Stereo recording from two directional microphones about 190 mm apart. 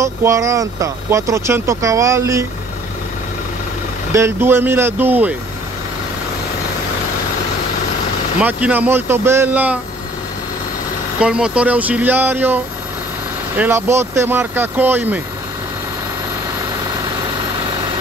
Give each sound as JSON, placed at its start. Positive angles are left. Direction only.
{"t": 0.0, "sound": "speech", "side_deg": -15}
{"t": 4.1, "sound": "speech", "side_deg": -15}
{"t": 8.4, "sound": "speech", "side_deg": -5}
{"t": 11.1, "sound": "speech", "side_deg": -5}
{"t": 13.6, "sound": "speech", "side_deg": -10}